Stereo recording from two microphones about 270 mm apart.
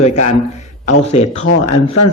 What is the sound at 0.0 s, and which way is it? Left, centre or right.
A man's voice, left.